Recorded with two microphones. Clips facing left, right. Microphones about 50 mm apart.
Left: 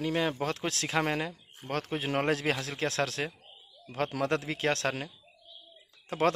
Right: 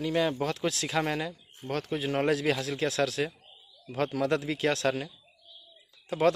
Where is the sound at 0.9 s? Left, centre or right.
Left.